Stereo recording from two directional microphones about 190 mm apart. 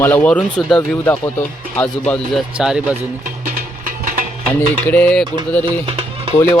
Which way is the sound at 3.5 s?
45° right (ahead or behind).